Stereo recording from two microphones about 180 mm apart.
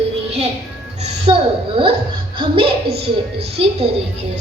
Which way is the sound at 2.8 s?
60° right (ahead or behind).